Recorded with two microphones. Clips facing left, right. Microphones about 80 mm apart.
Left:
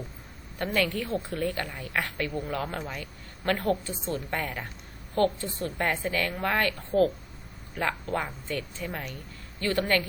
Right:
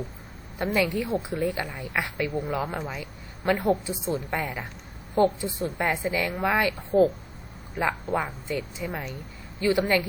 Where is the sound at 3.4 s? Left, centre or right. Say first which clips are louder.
Right 3 dB; centre.